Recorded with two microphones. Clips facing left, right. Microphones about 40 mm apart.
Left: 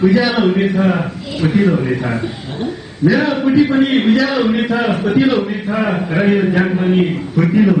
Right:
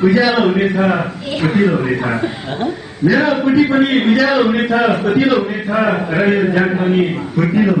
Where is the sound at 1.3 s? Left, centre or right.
Right.